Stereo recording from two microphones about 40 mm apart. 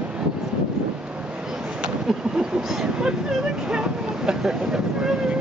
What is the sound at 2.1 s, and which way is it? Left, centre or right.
Vehicle, centre.